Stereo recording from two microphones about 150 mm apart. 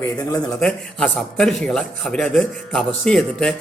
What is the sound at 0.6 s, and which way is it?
A man's voice, 5° left (ahead or behind).